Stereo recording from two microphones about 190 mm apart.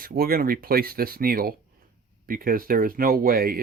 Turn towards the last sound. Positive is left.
turn(degrees=-50)  # may be behind; listen again after turning